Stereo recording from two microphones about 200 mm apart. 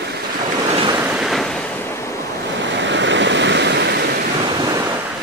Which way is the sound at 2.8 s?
65° right (ahead or behind).